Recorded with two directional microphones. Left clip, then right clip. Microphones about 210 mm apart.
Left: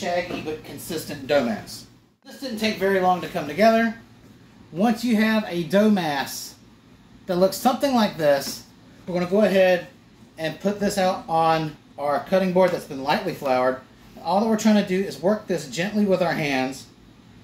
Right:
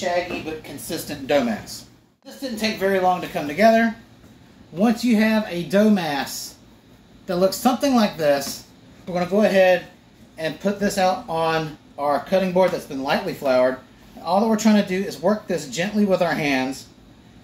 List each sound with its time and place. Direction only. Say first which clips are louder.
0.8 s speech: right 1 dB; centre (ahead or behind)
7.2 s speech: right 1 dB; 5° left (ahead or behind)